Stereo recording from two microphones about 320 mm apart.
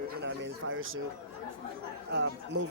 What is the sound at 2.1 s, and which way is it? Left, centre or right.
Speech, right.